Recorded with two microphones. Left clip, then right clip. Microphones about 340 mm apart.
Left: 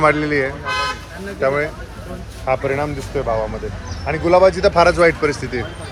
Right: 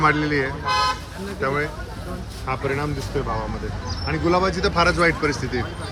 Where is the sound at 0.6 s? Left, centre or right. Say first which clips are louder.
Even; right.